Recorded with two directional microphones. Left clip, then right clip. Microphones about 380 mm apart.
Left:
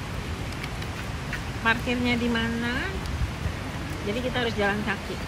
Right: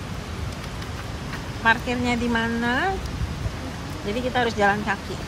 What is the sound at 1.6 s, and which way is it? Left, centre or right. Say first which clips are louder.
A woman's voice: right 4 dB; centre.